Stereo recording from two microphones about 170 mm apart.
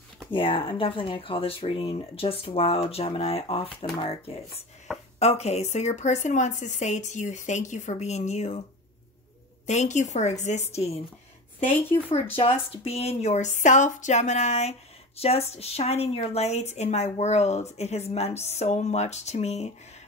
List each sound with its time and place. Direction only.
0.3 s a woman's voice: 30° left (ahead or behind)
4.9 s a sound: centre (ahead or behind)
5.2 s a woman's voice: 40° left (ahead or behind)
9.7 s a woman's voice: 45° left (ahead or behind)
12.4 s a woman's voice: 35° left (ahead or behind)